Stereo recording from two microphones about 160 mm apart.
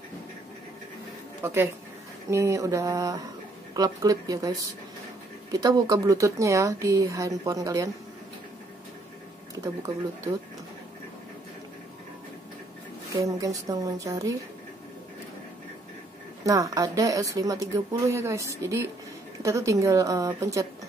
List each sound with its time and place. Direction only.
1.4 s speech: 15° right (ahead or behind)
9.6 s speech: 20° right (ahead or behind)
13.2 s speech: 20° right (ahead or behind)
16.4 s speech: 20° right (ahead or behind)